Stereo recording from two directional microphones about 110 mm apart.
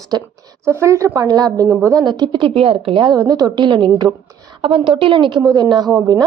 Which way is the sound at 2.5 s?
60° right (ahead or behind).